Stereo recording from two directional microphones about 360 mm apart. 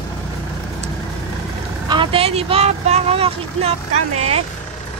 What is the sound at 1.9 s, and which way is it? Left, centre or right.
Speech, centre.